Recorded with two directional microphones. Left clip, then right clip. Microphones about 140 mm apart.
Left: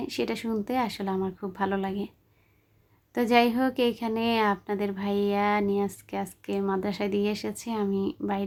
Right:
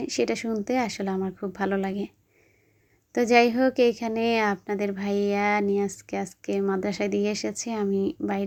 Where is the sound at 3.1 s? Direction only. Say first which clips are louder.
Right 3 dB; 25° right (ahead or behind).